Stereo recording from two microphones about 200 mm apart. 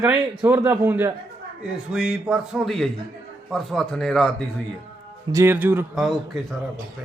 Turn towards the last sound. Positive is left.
turn(degrees=0)  # may be behind; listen again after turning